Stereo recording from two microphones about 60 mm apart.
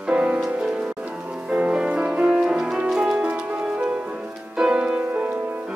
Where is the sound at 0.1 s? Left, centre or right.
Centre.